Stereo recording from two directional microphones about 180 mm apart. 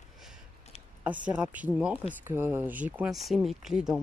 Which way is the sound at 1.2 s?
10° right (ahead or behind).